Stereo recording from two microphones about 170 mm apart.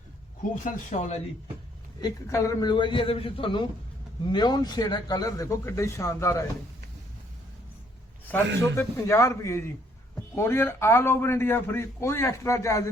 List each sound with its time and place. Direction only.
0.6 s speech: 50° left (ahead or behind)
2.0 s a man's voice: 20° left (ahead or behind)
8.3 s a man's voice: 15° left (ahead or behind)